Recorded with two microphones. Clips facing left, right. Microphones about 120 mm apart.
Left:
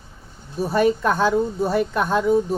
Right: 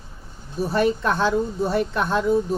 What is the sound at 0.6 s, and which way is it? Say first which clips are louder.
A woman's voice: left 2 dB; 40° left (ahead or behind).